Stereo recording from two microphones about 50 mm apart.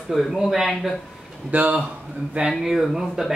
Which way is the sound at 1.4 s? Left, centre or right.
Right.